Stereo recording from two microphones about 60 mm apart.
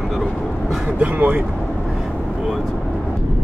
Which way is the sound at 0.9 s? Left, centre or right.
Right.